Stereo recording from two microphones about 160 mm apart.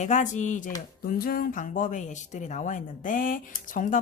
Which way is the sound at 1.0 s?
65° left (ahead or behind).